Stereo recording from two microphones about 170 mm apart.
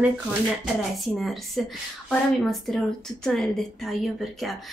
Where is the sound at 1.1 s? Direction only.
Centre (ahead or behind).